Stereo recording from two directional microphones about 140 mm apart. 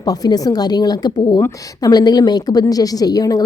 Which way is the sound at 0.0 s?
25° left (ahead or behind).